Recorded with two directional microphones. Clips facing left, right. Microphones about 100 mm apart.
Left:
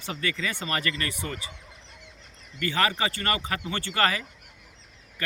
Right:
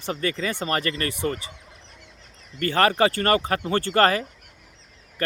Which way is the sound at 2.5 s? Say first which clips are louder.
Right 6 dB; 45° right (ahead or behind).